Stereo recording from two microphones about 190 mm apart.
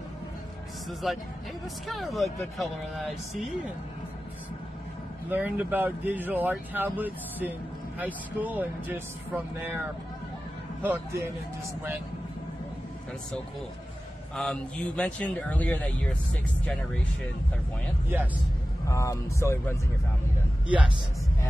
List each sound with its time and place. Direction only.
1.0 s speech: centre (ahead or behind)
5.3 s speech: 10° right (ahead or behind)
10.8 s speech: 15° right (ahead or behind)
14.3 s speech: 5° left (ahead or behind)
18.9 s speech: 15° left (ahead or behind)
20.6 s a man's voice: 5° right (ahead or behind)